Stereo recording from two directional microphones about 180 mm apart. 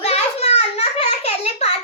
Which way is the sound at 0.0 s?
35° left (ahead or behind).